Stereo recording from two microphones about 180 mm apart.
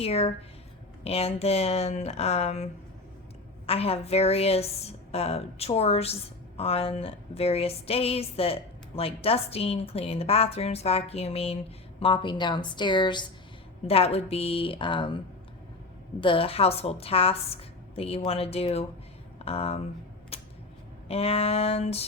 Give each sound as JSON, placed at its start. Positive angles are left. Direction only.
{"t": 0.0, "sound": "a woman's voice", "side_deg": 35}
{"t": 3.7, "sound": "a woman's voice", "side_deg": 35}
{"t": 16.2, "sound": "a woman's voice", "side_deg": 30}
{"t": 20.3, "sound": "a sound", "side_deg": 35}
{"t": 21.1, "sound": "a woman's voice", "side_deg": 35}